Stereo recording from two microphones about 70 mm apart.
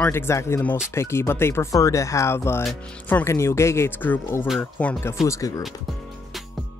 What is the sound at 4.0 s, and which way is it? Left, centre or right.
Speech, left.